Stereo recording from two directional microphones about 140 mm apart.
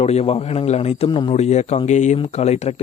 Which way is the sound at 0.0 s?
50° left (ahead or behind).